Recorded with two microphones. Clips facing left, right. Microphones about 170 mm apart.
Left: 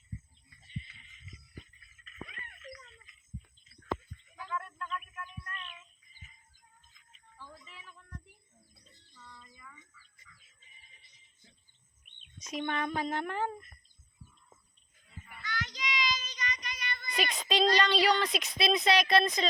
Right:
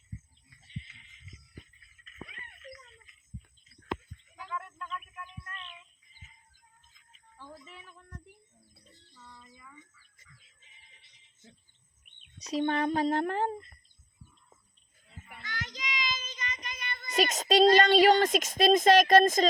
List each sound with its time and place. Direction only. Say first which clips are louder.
4.4 s a sound: left 1 dB; 15° right (ahead or behind)
7.7 s child singing: right 2 dB; 50° right (ahead or behind)
9.1 s a sound: right 1 dB; 15° right (ahead or behind)
12.4 s speech: right 6 dB; 35° right (ahead or behind)
15.4 s child singing: left 2 dB; 50° right (ahead or behind)
17.1 s speech: right 6 dB; 45° right (ahead or behind)